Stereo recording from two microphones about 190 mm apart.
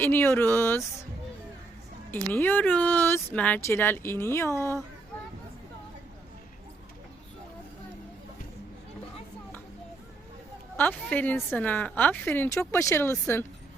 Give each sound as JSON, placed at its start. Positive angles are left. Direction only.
{"t": 0.0, "sound": "speech", "side_deg": 10}
{"t": 2.0, "sound": "speech", "side_deg": 10}
{"t": 10.8, "sound": "speech", "side_deg": 10}